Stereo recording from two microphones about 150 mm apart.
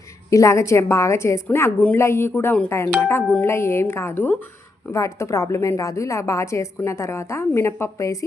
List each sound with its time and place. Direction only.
0.3 s a woman's voice: 20° left (ahead or behind)